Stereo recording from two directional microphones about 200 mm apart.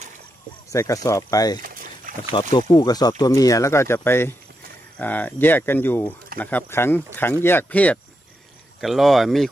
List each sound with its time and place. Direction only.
0.7 s speech: 15° left (ahead or behind)
1.6 s boat: 45° right (ahead or behind)
2.7 s speech: 20° left (ahead or behind); by 9.5 s centre (ahead or behind)